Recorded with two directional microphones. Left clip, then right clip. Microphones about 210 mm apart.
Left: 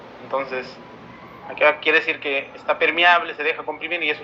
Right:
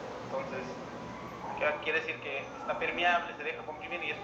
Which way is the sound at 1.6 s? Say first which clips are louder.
Left 15 dB; 45° left (ahead or behind).